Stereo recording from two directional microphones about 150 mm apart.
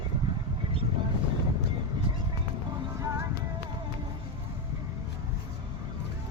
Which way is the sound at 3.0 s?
20° right (ahead or behind).